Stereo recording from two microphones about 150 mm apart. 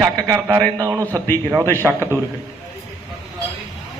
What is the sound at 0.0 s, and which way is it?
A man's voice, 20° right (ahead or behind).